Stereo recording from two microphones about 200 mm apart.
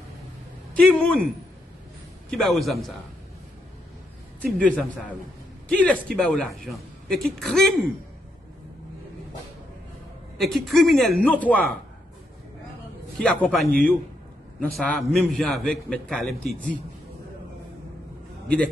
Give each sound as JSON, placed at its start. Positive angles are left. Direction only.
{"t": 0.7, "sound": "speech", "side_deg": 5}
{"t": 2.3, "sound": "speech", "side_deg": 0}
{"t": 4.4, "sound": "speech", "side_deg": 5}
{"t": 10.3, "sound": "speech", "side_deg": 0}
{"t": 13.2, "sound": "speech", "side_deg": 5}
{"t": 14.8, "sound": "speech", "side_deg": 5}